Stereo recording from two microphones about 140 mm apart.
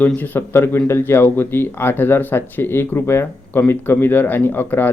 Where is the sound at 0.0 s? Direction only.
10° left (ahead or behind).